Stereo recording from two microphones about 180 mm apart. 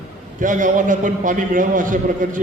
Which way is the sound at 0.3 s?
45° right (ahead or behind).